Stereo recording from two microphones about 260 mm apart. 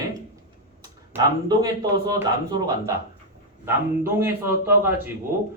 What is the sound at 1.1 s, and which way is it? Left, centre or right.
Speech, centre.